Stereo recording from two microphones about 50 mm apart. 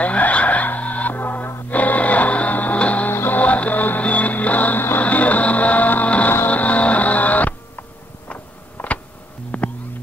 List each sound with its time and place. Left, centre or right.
0.0 s music: left
3.1 s music: left
8.3 s a sound: left
9.5 s music: left